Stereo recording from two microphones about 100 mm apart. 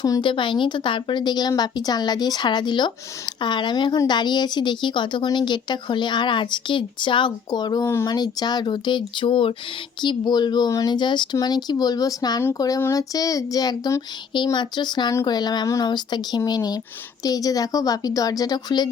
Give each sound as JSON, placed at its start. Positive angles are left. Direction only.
{"t": 0.2, "sound": "speech", "side_deg": 55}
{"t": 10.0, "sound": "a woman's voice", "side_deg": 50}